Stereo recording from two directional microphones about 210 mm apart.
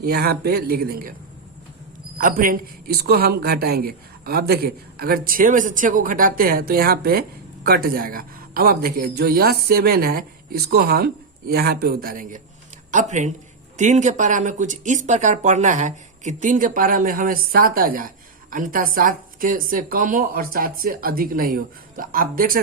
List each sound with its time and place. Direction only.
0.0 s speech: 45° right (ahead or behind)
2.1 s speech: 40° right (ahead or behind)